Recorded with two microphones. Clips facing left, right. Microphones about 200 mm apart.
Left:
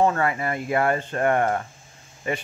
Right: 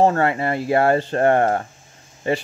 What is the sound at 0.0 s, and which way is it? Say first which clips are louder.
Speech: right 4 dB; 30° right (ahead or behind).